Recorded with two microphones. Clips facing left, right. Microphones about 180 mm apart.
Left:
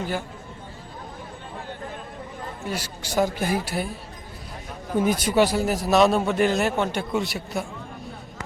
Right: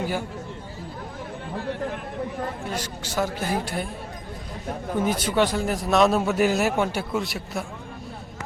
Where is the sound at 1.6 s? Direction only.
70° right (ahead or behind).